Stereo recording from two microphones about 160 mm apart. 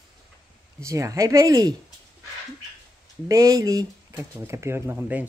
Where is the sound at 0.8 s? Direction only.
20° right (ahead or behind).